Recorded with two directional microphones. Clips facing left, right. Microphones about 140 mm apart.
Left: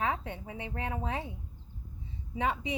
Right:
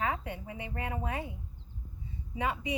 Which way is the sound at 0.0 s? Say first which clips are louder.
Left 1 dB; 25° left (ahead or behind).